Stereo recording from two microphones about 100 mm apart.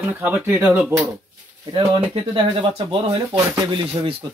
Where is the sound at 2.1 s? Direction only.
60° right (ahead or behind).